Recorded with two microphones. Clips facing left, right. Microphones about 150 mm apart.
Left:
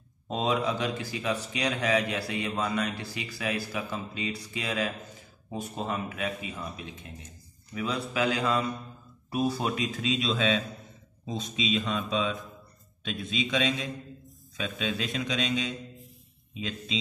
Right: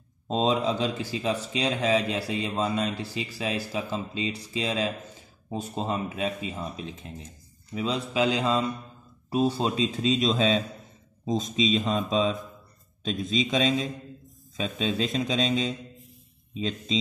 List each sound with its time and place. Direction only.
0.3 s a man's voice: 25° right (ahead or behind)